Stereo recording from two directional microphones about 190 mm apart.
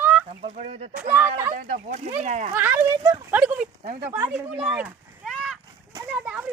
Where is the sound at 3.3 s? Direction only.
5° right (ahead or behind).